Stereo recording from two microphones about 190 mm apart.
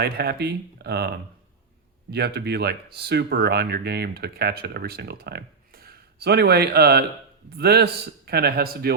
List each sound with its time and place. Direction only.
0.0 s speech: 60° right (ahead or behind)